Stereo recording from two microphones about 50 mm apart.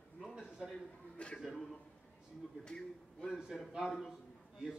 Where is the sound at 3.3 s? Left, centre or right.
Centre.